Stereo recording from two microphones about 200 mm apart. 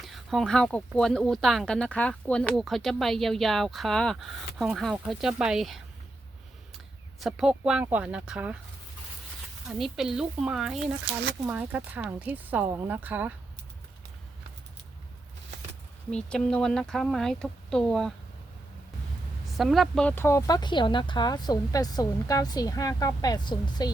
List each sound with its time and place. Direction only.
0.0 s speech: centre (ahead or behind)
7.2 s speech: centre (ahead or behind)
9.6 s speech: centre (ahead or behind)
16.1 s speech: 5° left (ahead or behind)
19.5 s speech: centre (ahead or behind); by 23.9 s 20° left (ahead or behind)